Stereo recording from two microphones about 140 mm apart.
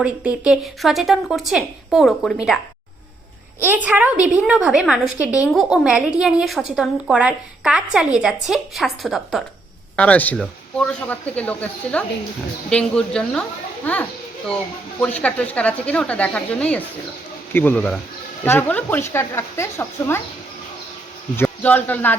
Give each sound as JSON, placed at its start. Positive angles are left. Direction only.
{"t": 0.0, "sound": "a woman's voice", "side_deg": -10}
{"t": 3.6, "sound": "a woman's voice", "side_deg": -15}
{"t": 15.0, "sound": "speech", "side_deg": 10}
{"t": 21.3, "sound": "speech", "side_deg": 15}